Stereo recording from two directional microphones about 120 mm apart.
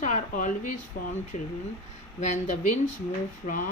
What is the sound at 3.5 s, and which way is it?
Speech, 90° left.